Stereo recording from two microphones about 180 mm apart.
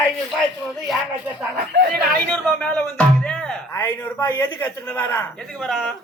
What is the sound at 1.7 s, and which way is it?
Speech, 55° right (ahead or behind).